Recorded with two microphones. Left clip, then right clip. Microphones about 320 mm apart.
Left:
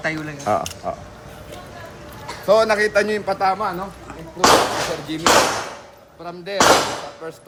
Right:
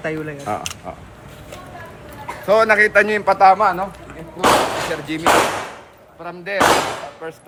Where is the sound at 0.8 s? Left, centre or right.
Left.